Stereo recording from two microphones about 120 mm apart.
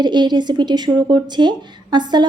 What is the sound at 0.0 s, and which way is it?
Speech, 40° right (ahead or behind).